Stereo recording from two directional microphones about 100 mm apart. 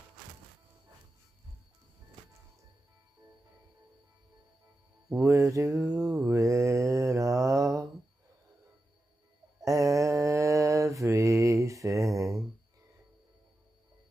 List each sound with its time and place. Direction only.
5.1 s mantra: 30° right (ahead or behind)
9.6 s mantra: 35° right (ahead or behind)